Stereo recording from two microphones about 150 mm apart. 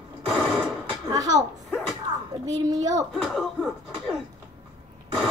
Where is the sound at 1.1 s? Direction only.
25° right (ahead or behind).